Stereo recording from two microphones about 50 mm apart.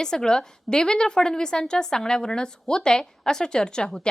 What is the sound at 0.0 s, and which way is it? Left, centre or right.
A woman's voice, centre.